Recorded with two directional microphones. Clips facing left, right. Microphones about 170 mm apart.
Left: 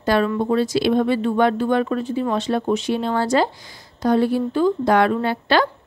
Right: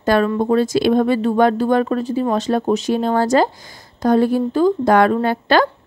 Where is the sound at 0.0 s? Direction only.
50° right (ahead or behind).